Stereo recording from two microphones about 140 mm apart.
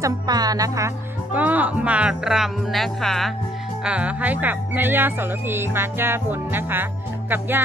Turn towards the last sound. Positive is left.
turn(degrees=-15)  # may be behind; listen again after turning